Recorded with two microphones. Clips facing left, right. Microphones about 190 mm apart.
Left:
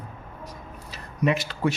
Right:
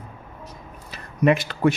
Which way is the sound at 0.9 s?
55° right (ahead or behind).